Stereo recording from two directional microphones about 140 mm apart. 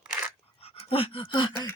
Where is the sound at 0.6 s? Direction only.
40° left (ahead or behind).